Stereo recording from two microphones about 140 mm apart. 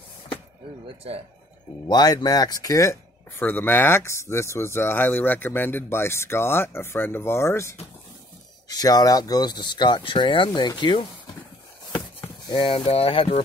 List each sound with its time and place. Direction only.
1.9 s speech: 30° left (ahead or behind)
11.9 s chopping: 35° left (ahead or behind)
12.7 s speech: 45° left (ahead or behind)